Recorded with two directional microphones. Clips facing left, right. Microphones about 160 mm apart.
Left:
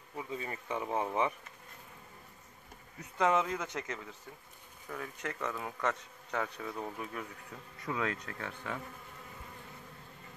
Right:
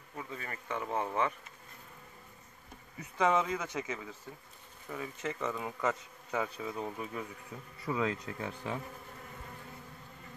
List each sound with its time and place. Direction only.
0.1 s speech: 15° left (ahead or behind)
3.0 s speech: centre (ahead or behind)